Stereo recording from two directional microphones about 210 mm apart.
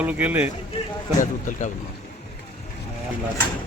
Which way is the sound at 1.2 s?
40° left (ahead or behind).